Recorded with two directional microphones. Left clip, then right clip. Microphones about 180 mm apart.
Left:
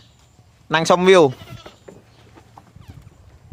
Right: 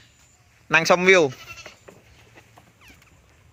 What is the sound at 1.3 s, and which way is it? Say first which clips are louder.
Goat: left 1 dB; 50° left (ahead or behind).